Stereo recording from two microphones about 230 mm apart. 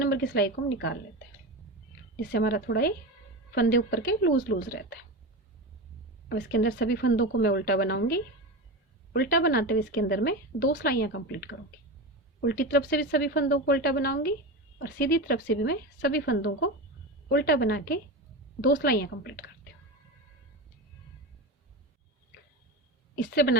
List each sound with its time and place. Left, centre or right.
0.0 s a woman's voice: left
2.3 s a woman's voice: left
6.2 s a woman's voice: left
23.1 s a woman's voice: left